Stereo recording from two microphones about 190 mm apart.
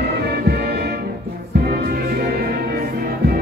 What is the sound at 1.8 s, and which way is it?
Music, 50° right (ahead or behind).